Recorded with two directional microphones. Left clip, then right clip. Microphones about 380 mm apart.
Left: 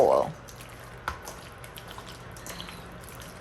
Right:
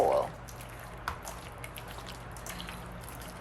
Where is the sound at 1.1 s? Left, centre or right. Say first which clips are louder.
Left 3 dB; centre.